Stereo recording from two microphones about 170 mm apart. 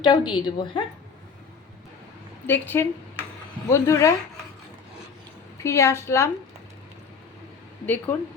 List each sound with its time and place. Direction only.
0.0 s a woman's voice: 30° left (ahead or behind)
2.5 s a woman's voice: 10° left (ahead or behind)
5.6 s a woman's voice: 15° left (ahead or behind)
8.1 s a woman's voice: 10° left (ahead or behind)